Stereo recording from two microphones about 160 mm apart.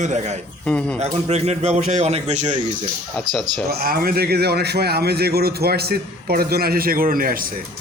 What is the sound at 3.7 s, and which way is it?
A man's voice, 65° right (ahead or behind).